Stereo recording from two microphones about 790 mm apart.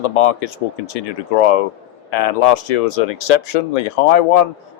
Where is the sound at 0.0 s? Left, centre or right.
Left.